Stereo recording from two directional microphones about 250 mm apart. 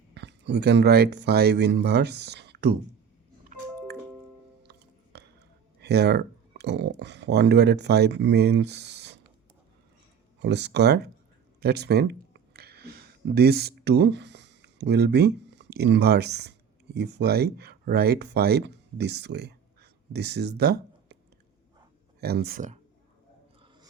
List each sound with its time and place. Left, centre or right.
0.1 s speech: right
3.5 s music: right
5.8 s speech: right
10.4 s speech: right
22.2 s speech: right